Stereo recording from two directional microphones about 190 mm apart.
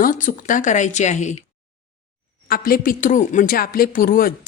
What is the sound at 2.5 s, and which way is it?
A woman's voice, 50° left (ahead or behind).